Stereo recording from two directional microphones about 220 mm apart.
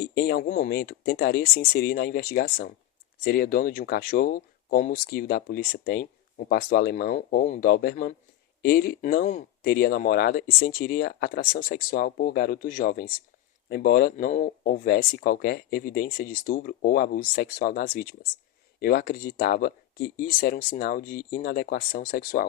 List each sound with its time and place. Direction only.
0.0 s speech: 45° left (ahead or behind)